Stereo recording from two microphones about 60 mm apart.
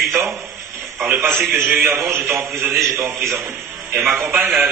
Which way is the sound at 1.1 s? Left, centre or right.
Right.